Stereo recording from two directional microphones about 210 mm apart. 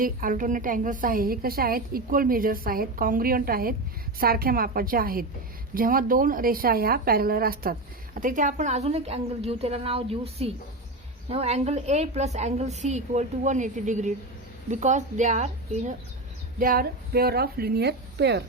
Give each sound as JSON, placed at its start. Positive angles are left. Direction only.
{"t": 0.0, "sound": "a woman's voice", "side_deg": -40}
{"t": 16.6, "sound": "a woman's voice", "side_deg": -45}